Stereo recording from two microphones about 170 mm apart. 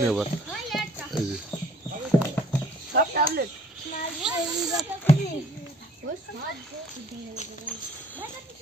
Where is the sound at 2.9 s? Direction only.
65° right (ahead or behind).